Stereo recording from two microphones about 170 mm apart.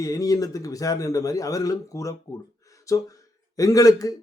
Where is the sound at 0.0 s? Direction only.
20° left (ahead or behind).